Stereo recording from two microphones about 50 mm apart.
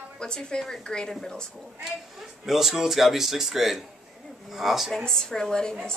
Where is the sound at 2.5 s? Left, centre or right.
Centre.